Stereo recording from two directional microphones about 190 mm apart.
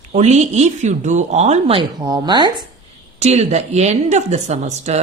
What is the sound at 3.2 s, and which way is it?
Speech, 35° right (ahead or behind).